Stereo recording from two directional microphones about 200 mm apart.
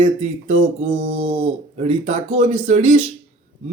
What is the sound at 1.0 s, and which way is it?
Mantra, 30° right (ahead or behind).